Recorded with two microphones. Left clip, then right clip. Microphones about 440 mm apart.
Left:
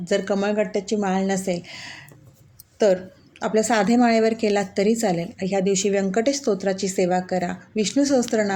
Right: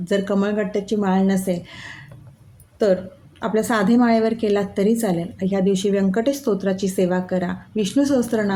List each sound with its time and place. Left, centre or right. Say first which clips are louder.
0.0 s a woman's voice: right 1 dB; right